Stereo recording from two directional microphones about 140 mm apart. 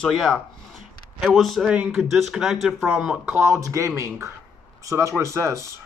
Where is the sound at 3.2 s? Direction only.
15° right (ahead or behind).